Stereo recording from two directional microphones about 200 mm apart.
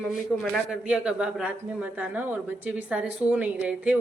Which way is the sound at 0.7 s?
5° right (ahead or behind).